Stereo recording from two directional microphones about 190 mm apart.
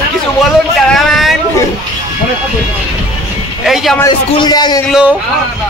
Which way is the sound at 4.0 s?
20° left (ahead or behind).